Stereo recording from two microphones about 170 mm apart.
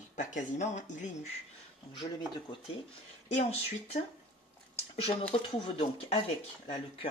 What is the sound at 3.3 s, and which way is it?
Speech, 40° left (ahead or behind).